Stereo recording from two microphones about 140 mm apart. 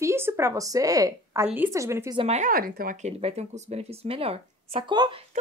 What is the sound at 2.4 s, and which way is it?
Speech, 90° right.